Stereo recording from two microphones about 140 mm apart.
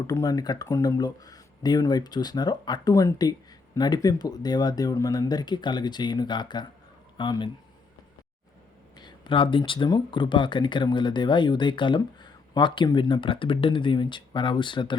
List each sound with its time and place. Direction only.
0.1 s speech: 25° left (ahead or behind)
9.0 s speech: 35° left (ahead or behind)